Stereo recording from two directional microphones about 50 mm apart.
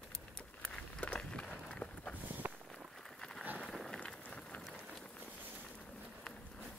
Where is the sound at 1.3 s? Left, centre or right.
Centre.